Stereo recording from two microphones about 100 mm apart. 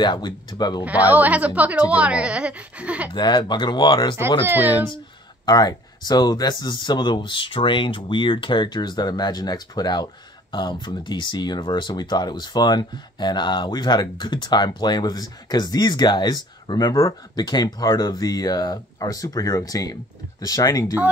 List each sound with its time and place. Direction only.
0.0 s speech: 50° left (ahead or behind)
0.8 s a woman's voice: 15° right (ahead or behind)
3.1 s speech: 50° left (ahead or behind)
4.5 s speech: 20° right (ahead or behind)
5.4 s speech: 45° left (ahead or behind)